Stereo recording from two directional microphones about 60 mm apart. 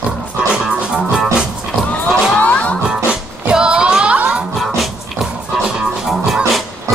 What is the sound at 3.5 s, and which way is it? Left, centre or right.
Music, centre.